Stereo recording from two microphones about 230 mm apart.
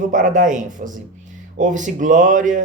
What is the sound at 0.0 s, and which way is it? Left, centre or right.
Speech, right.